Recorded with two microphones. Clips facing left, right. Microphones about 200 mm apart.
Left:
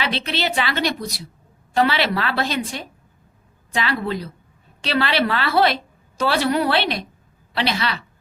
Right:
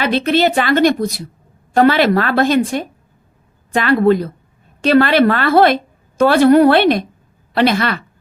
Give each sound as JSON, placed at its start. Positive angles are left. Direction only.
{"t": 0.0, "sound": "a woman's voice", "side_deg": -50}